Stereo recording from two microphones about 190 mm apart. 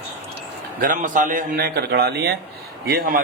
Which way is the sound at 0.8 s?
45° right (ahead or behind).